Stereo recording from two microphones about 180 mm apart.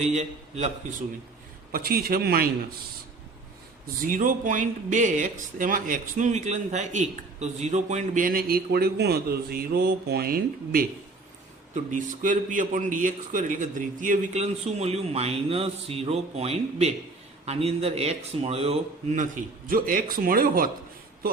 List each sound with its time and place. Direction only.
0.0 s a man's voice: 40° right (ahead or behind)
1.7 s a man's voice: 55° right (ahead or behind)
4.0 s speech: 50° right (ahead or behind)
11.7 s a man's voice: 45° right (ahead or behind)